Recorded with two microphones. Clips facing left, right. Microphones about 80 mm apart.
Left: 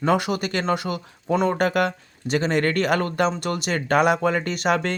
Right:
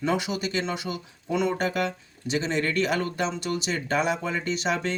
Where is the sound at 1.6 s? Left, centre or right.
Left.